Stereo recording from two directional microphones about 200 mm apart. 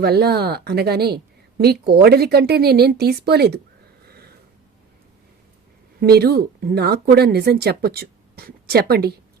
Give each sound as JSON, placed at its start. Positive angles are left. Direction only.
{"t": 0.0, "sound": "a woman's voice", "side_deg": -55}
{"t": 6.0, "sound": "a woman's voice", "side_deg": -50}